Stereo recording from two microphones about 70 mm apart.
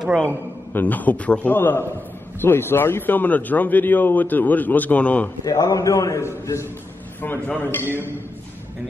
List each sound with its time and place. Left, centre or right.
0.7 s a man's voice: left
5.4 s a man's voice: left
7.2 s a man's voice: left